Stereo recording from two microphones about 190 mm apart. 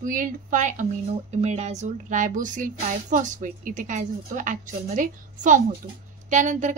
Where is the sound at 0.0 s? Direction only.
45° right (ahead or behind).